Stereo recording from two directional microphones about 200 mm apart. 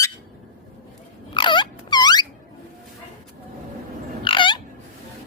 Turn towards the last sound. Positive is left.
turn(degrees=25)  # may be behind; listen again after turning